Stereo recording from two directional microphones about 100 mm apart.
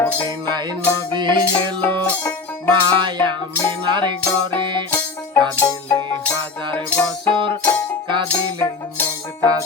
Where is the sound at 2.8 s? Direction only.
50° right (ahead or behind).